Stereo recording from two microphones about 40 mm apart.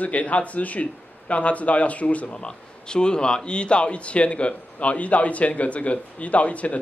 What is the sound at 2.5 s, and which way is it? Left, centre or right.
Speech, left.